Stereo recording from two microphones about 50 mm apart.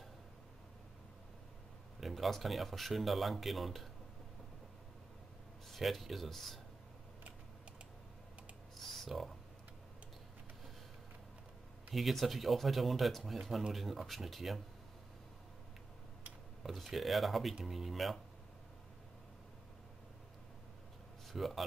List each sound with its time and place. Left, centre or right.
2.0 s speech: centre
5.7 s speech: centre
8.7 s a sound: centre
11.9 s speech: centre
16.6 s speech: centre
21.3 s a man's voice: centre